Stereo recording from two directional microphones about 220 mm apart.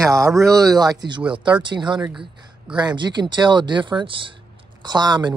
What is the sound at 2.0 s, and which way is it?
Speech, 5° right (ahead or behind).